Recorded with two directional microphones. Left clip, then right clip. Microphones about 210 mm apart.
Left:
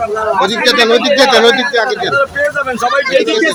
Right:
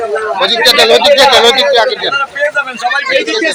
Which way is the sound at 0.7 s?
15° left (ahead or behind).